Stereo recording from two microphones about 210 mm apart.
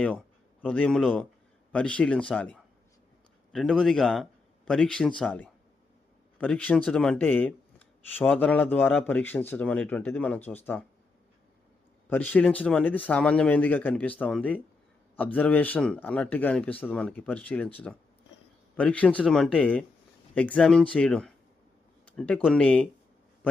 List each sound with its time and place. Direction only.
0.6 s a man's voice: 5° left (ahead or behind)
12.0 s speech: 10° left (ahead or behind)